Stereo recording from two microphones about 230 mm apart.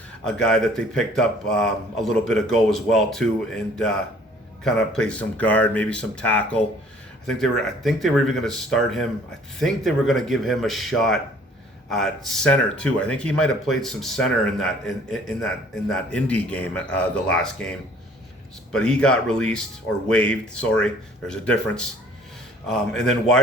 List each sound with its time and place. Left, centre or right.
0.3 s speech: centre